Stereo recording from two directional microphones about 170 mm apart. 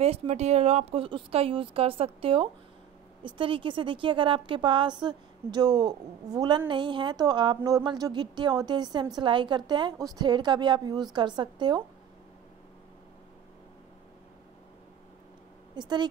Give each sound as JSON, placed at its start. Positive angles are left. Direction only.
{"t": 0.0, "sound": "a woman's voice", "side_deg": -40}
{"t": 15.7, "sound": "speech", "side_deg": -25}